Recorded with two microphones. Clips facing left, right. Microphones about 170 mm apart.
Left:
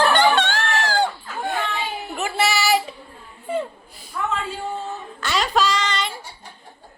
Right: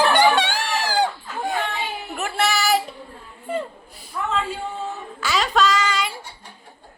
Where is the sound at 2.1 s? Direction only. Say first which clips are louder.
Left 1 dB; 5° left (ahead or behind).